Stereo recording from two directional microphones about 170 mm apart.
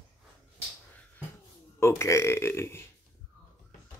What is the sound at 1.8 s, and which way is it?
Speech, 15° left (ahead or behind).